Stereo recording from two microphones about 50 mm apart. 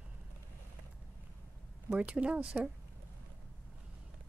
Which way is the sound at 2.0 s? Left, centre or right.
Right.